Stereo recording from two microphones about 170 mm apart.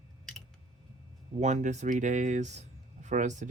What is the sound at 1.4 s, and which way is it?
Speech, 45° right (ahead or behind).